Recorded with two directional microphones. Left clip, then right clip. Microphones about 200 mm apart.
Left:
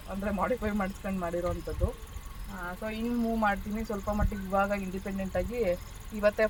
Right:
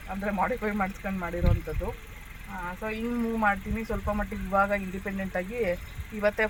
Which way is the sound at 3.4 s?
10° right (ahead or behind).